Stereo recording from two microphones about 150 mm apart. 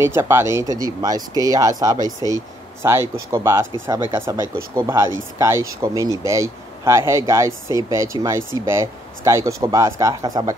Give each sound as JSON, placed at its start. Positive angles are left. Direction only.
{"t": 0.0, "sound": "speech", "side_deg": -15}